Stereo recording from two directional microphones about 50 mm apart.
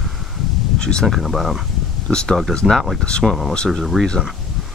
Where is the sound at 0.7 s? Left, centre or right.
Centre.